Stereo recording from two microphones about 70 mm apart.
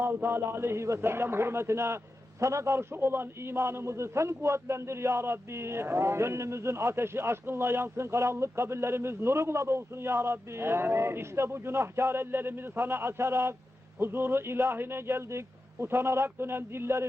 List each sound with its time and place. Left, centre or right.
0.0 s a man's voice: right